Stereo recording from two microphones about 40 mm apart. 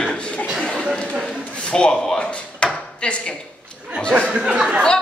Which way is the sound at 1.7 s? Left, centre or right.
Centre.